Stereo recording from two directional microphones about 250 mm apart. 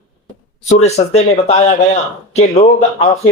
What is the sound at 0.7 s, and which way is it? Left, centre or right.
A man's voice, left.